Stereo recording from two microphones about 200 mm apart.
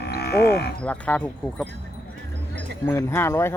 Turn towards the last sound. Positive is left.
turn(degrees=10)  # may be behind; listen again after turning